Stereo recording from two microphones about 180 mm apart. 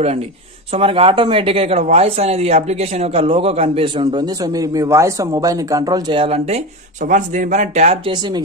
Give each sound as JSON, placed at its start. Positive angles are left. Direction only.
{"t": 0.7, "sound": "speech", "side_deg": -30}
{"t": 7.1, "sound": "speech", "side_deg": -45}